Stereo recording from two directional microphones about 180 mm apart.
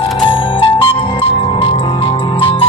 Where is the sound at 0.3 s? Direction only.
30° left (ahead or behind).